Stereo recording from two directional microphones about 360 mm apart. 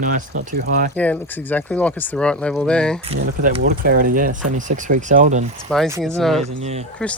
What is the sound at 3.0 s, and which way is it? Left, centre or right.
Speech, centre.